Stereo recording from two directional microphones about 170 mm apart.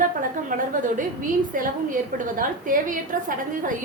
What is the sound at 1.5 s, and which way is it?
A woman's voice, 50° right (ahead or behind).